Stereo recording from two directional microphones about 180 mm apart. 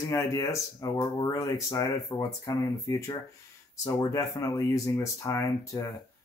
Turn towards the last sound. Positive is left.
turn(degrees=20)  # may be behind; listen again after turning